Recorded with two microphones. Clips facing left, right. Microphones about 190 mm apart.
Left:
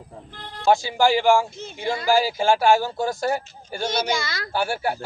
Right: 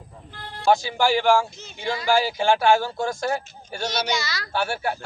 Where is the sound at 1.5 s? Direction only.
55° left (ahead or behind).